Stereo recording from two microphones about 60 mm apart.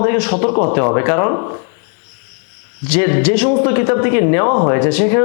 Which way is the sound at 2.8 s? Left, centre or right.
Left.